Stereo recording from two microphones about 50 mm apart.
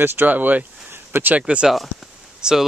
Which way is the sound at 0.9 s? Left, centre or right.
Right.